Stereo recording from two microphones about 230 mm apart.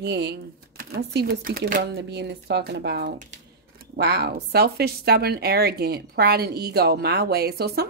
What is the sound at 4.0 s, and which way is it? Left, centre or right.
A woman's voice, right.